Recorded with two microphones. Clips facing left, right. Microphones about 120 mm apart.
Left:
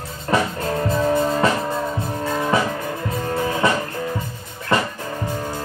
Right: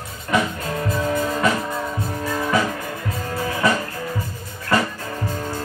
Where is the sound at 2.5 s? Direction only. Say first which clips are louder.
Left 1 dB; 25° left (ahead or behind).